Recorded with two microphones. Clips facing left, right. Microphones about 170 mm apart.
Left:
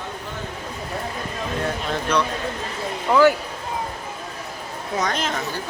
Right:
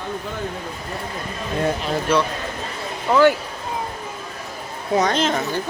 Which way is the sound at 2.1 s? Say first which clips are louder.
Right 3 dB; 5° right (ahead or behind).